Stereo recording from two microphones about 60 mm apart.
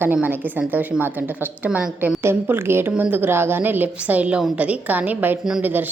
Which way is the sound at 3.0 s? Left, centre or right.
Right.